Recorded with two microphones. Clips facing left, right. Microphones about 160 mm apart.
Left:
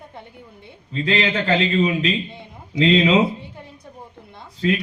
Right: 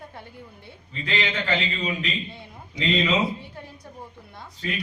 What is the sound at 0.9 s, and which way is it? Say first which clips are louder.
A man's voice: left 7 dB; 90° left.